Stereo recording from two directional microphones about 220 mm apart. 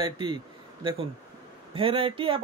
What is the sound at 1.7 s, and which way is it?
Speech, 25° right (ahead or behind).